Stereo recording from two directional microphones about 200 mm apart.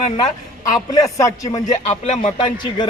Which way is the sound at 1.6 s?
35° left (ahead or behind).